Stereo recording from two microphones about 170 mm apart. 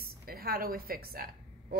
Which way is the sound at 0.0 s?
60° right (ahead or behind).